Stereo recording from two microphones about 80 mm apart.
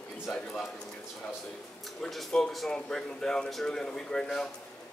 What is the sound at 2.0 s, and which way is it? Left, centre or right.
A man's voice, centre.